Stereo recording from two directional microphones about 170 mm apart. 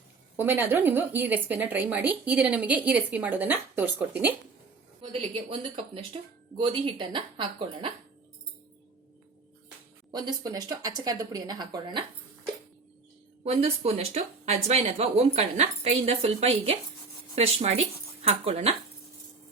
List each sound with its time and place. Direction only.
0.3 s a woman's voice: 10° right (ahead or behind)
5.1 s speech: 30° right (ahead or behind)
10.1 s speech: 25° right (ahead or behind)
13.4 s speech: 40° right (ahead or behind)